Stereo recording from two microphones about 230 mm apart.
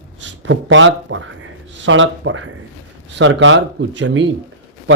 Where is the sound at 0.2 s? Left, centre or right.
Right.